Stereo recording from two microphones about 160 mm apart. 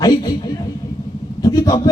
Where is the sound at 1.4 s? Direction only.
20° left (ahead or behind).